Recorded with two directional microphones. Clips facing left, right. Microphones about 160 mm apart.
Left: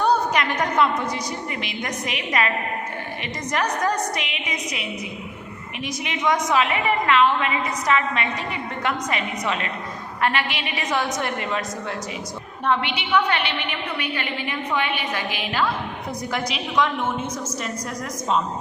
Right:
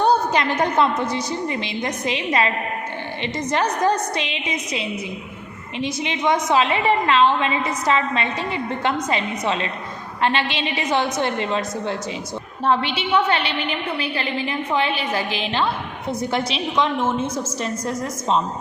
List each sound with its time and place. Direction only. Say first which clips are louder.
0.0 s a sound: right 2 dB; 30° right (ahead or behind)
1.1 s a woman's voice: right 5 dB; 30° right (ahead or behind)
3.5 s a woman's voice: right 3 dB; 25° right (ahead or behind)